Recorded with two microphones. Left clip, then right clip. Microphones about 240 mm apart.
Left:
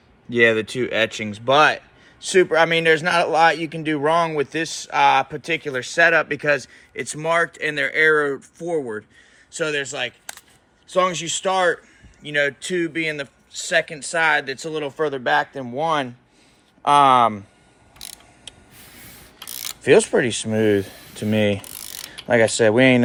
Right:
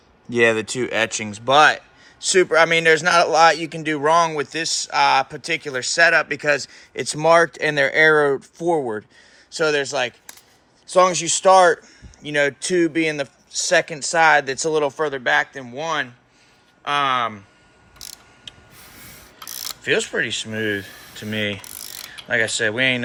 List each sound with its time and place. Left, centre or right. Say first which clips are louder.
0.3 s speech: left 1 dB; centre; by 14.8 s right
14.8 s speech: right 5 dB; centre
15.0 s speech: even; centre
16.8 s speech: left 6 dB; centre
19.8 s speech: left 5 dB; left